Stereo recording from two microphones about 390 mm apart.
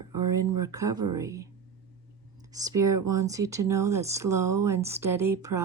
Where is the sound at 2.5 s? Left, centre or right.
Centre.